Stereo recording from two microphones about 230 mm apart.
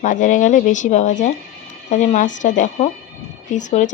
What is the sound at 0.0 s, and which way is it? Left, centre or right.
A woman's voice, left.